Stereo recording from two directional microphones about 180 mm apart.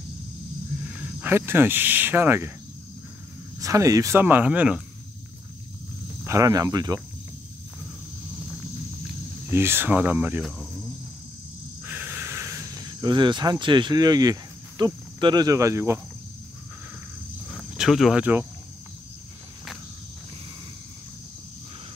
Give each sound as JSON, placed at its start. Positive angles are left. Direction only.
{"t": 0.8, "sound": "speech", "side_deg": -10}
{"t": 3.5, "sound": "speech", "side_deg": -15}
{"t": 6.2, "sound": "speech", "side_deg": -20}
{"t": 9.5, "sound": "speech", "side_deg": -15}
{"t": 11.8, "sound": "cricket", "side_deg": -10}
{"t": 17.5, "sound": "speech", "side_deg": 0}